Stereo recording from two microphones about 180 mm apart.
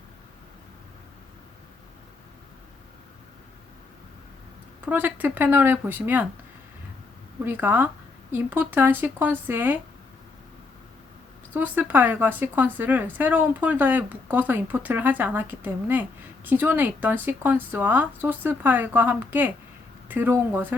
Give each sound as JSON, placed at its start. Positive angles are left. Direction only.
{"t": 4.9, "sound": "a woman's voice", "side_deg": -10}
{"t": 7.4, "sound": "a woman's voice", "side_deg": -10}
{"t": 11.5, "sound": "a woman's voice", "side_deg": -10}